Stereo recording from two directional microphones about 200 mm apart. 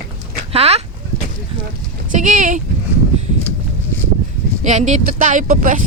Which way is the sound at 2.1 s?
40° right (ahead or behind).